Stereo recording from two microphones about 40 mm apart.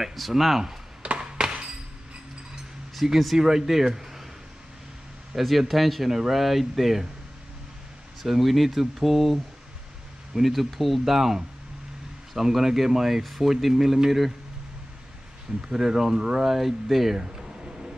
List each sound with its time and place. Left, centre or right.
0.0 s speech: centre
1.0 s a sound: right
2.9 s speech: centre
5.4 s speech: centre
8.2 s speech: centre
15.6 s speech: centre